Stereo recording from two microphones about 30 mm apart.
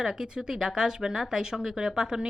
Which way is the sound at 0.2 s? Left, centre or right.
Right.